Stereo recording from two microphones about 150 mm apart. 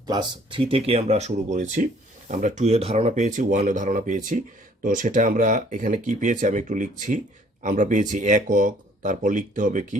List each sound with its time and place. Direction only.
0.1 s speech: 30° right (ahead or behind); by 10.0 s 55° right (ahead or behind)